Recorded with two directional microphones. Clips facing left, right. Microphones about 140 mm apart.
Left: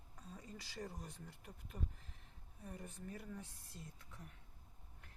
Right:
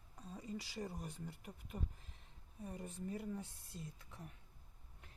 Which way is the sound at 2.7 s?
20° right (ahead or behind).